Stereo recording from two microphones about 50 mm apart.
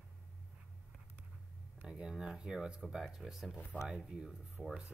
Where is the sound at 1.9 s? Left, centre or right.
Centre.